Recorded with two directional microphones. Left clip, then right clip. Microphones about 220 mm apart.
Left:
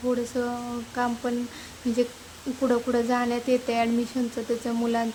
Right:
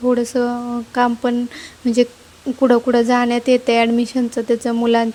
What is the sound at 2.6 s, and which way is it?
A woman's voice, 35° right (ahead or behind).